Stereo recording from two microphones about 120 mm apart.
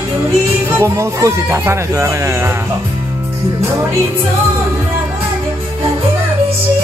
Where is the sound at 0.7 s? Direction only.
20° right (ahead or behind).